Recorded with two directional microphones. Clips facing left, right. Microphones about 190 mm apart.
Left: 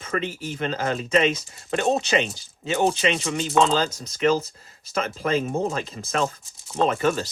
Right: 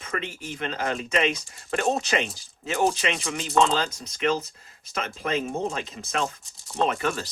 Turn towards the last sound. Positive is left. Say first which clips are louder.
# left 5 dB
turn(degrees=35)  # may be behind; listen again after turning